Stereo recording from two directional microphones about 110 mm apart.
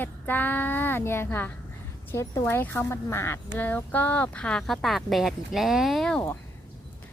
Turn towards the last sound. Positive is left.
turn(degrees=5)  # may be behind; listen again after turning